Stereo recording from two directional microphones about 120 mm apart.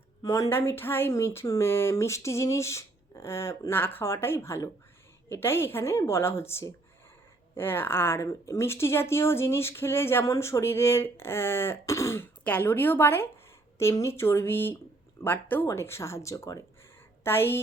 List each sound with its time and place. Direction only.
0.2 s speech: 25° left (ahead or behind)
17.2 s speech: 20° left (ahead or behind)